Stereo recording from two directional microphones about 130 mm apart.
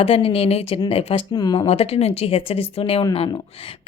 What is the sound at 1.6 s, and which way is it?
Speech, 50° left (ahead or behind).